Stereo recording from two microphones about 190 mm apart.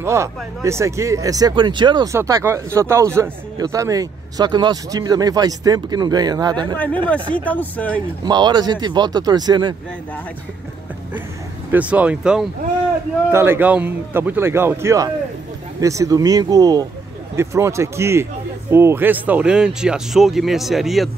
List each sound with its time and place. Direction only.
0.0 s speech: 15° right (ahead or behind)
7.3 s speech: 10° left (ahead or behind)
8.2 s speech: 20° right (ahead or behind)
11.7 s speech: 5° right (ahead or behind)